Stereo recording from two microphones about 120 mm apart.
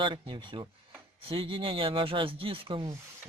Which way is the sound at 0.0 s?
40° right (ahead or behind).